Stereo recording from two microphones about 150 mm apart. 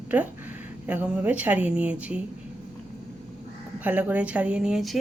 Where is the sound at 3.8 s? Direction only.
10° right (ahead or behind).